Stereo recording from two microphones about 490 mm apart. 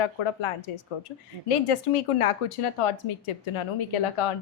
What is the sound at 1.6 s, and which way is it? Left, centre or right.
Speech, left.